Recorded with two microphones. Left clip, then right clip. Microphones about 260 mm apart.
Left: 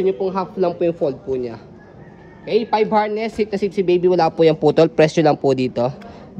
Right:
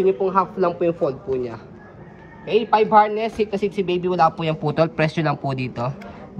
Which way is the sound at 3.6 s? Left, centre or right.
Left.